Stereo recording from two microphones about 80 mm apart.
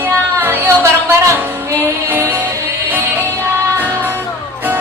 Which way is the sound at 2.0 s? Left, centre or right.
Right.